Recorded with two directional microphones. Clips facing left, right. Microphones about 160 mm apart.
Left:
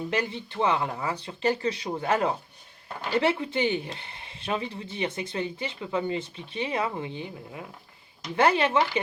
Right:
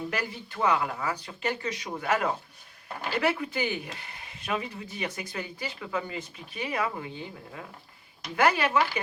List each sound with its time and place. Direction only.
0.1 s speech: 25° left (ahead or behind)